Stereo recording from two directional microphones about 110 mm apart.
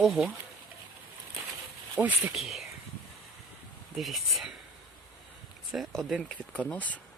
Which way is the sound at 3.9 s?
Centre (ahead or behind).